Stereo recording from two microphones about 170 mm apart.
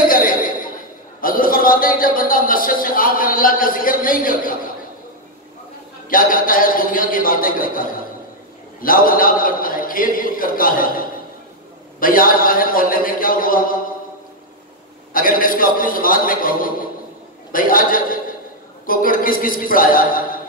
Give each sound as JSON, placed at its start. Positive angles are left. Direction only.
{"t": 0.1, "sound": "a sound", "side_deg": 55}
{"t": 1.2, "sound": "a man's voice", "side_deg": 55}
{"t": 6.0, "sound": "a man's voice", "side_deg": 55}
{"t": 15.1, "sound": "a man's voice", "side_deg": 55}